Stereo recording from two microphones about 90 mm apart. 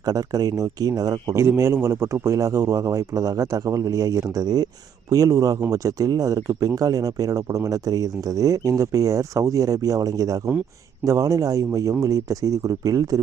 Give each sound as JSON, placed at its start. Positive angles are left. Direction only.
{"t": 0.0, "sound": "speech", "side_deg": -45}